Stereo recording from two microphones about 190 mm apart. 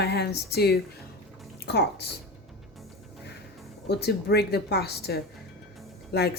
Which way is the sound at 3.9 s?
60° left (ahead or behind).